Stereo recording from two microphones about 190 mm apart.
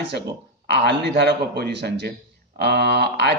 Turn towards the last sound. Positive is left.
turn(degrees=-60)  # may be behind; listen again after turning